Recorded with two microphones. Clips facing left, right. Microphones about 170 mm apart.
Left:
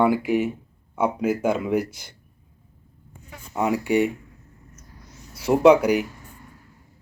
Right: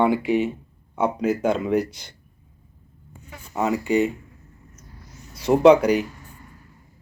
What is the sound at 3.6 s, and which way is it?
Speech, 10° left (ahead or behind).